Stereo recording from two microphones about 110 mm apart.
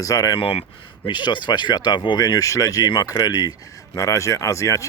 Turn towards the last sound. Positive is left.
turn(degrees=30)  # may be behind; listen again after turning